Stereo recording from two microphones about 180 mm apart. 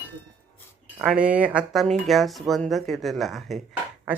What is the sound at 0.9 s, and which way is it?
Speech, 5° right (ahead or behind).